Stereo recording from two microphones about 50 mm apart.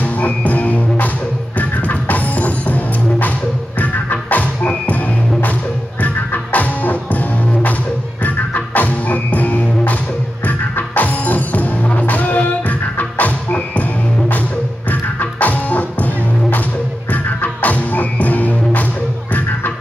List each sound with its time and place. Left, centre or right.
0.0 s music: left
14.9 s music: left